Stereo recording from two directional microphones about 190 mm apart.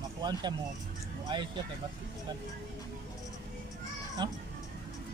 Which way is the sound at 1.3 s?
25° right (ahead or behind).